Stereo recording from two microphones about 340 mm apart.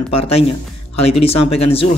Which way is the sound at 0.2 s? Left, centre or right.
Centre.